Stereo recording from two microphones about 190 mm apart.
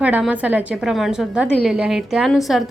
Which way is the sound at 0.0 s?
5° right (ahead or behind).